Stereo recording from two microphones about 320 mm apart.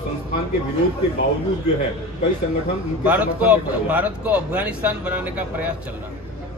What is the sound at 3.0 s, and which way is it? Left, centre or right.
Speech, centre.